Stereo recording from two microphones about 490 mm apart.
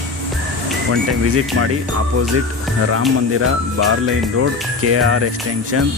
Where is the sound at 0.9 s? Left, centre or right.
Right.